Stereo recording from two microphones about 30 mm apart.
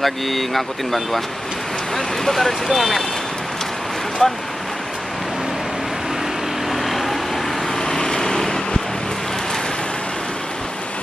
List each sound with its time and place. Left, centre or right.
0.0 s speech: centre
4.2 s speech: centre
6.7 s vehicle: centre
7.8 s vehicle: left